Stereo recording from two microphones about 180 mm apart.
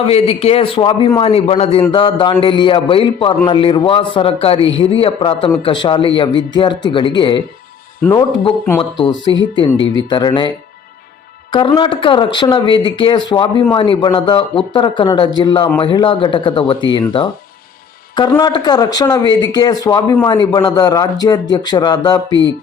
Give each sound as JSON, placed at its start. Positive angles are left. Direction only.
{"t": 0.0, "sound": "a man's voice", "side_deg": 35}
{"t": 8.8, "sound": "a man's voice", "side_deg": 25}
{"t": 11.5, "sound": "a man's voice", "side_deg": 25}